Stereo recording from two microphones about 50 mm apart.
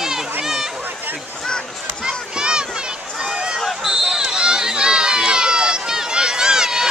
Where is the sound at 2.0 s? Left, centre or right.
Centre.